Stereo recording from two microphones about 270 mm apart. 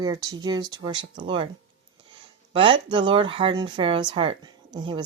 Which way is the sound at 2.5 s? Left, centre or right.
Centre.